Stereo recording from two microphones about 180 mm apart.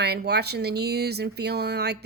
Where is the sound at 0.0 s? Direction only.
65° right (ahead or behind).